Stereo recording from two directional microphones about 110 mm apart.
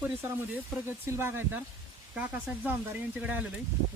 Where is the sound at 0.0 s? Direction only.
20° right (ahead or behind).